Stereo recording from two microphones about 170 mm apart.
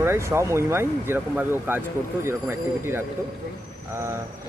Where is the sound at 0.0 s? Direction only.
15° right (ahead or behind).